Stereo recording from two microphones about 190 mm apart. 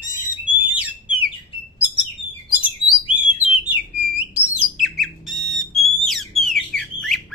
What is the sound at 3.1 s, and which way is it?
Bird, 30° left (ahead or behind).